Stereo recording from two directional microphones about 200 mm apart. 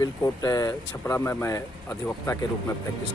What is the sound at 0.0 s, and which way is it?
Speech, 15° left (ahead or behind).